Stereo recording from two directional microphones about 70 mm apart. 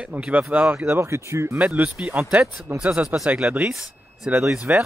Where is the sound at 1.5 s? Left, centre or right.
Right.